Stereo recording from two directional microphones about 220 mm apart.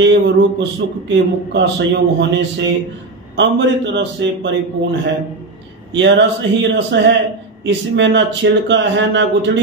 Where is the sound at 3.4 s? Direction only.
55° right (ahead or behind).